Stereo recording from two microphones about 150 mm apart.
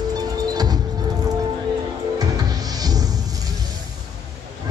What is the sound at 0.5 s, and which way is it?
Music, 25° right (ahead or behind).